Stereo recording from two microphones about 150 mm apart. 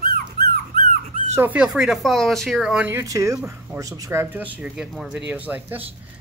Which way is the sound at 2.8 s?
20° right (ahead or behind).